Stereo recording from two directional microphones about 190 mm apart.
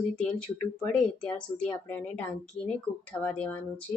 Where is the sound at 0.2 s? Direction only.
5° left (ahead or behind).